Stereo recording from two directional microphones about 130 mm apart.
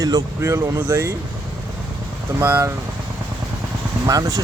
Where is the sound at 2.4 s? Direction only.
15° right (ahead or behind).